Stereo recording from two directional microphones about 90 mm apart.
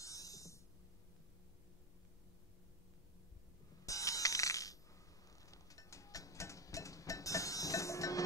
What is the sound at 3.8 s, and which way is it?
Music, 40° left (ahead or behind).